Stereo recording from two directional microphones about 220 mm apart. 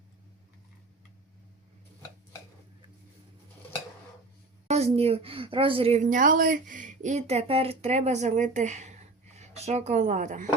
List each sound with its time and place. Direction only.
4.7 s a woman's voice: 30° right (ahead or behind)